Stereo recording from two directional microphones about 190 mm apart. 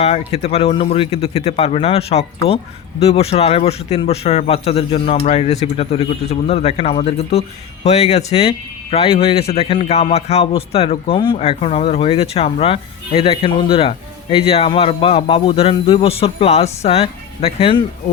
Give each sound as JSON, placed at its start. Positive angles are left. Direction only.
{"t": 0.0, "sound": "speech", "side_deg": 35}